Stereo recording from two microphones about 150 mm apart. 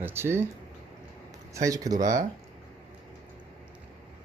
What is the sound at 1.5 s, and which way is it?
Speech, 20° right (ahead or behind).